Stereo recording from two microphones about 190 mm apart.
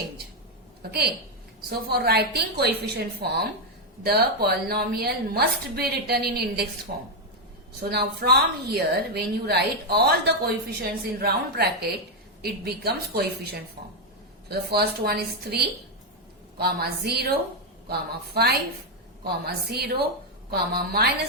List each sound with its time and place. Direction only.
0.8 s a woman's voice: 55° right (ahead or behind)
7.8 s a woman's voice: 55° right (ahead or behind)